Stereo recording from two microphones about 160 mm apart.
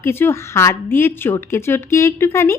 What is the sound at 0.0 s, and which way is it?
A woman's voice, 15° left (ahead or behind).